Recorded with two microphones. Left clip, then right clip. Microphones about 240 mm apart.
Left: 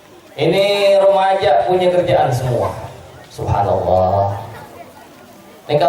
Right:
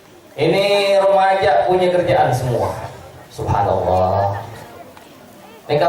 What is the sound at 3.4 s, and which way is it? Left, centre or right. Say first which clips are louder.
Speech: even; centre.